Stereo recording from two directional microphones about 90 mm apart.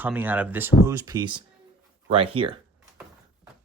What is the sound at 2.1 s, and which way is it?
Speech, 90° right.